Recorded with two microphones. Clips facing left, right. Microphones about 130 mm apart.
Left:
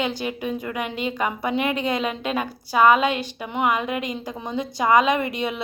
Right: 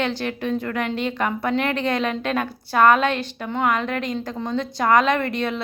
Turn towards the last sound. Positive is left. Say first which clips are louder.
# right 1 dB
turn(degrees=5)  # may be behind; listen again after turning